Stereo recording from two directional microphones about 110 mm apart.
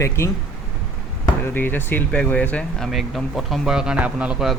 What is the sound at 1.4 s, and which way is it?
Speech, 20° left (ahead or behind).